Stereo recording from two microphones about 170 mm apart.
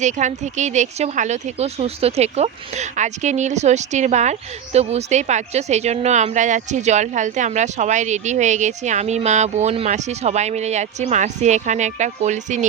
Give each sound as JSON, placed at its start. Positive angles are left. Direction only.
{"t": 0.0, "sound": "speech", "side_deg": -45}